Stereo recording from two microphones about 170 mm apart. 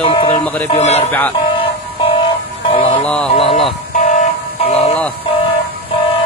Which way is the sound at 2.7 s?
30° left (ahead or behind).